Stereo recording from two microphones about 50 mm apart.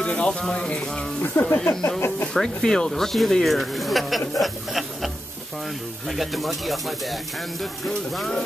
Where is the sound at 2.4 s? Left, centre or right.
Centre.